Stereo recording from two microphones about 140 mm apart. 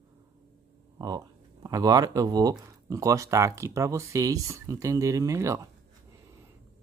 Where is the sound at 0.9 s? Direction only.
25° right (ahead or behind).